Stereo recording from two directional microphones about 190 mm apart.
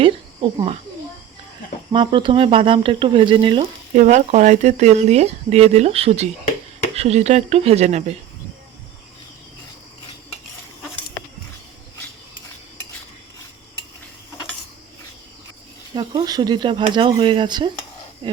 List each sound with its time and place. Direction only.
0.0 s a sound: 25° right (ahead or behind)
1.9 s speech: 25° right (ahead or behind)
3.9 s speech: 40° right (ahead or behind)
12.3 s cutlery: 75° left (ahead or behind)
16.0 s speech: 20° right (ahead or behind)